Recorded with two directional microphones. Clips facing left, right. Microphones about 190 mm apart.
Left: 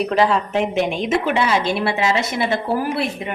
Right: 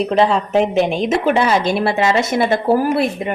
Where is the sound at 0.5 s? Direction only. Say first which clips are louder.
Right 4 dB; 35° right (ahead or behind).